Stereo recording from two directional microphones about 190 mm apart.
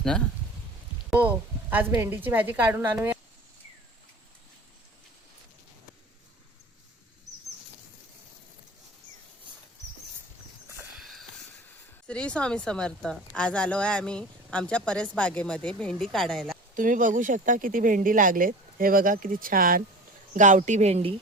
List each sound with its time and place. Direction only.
1.7 s a woman's voice: 10° right (ahead or behind)
10.9 s a sound: centre (ahead or behind)
12.0 s a woman's voice: 5° left (ahead or behind)
16.7 s speech: 45° right (ahead or behind)